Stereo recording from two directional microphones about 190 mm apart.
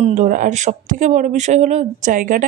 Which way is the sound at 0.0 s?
40° right (ahead or behind).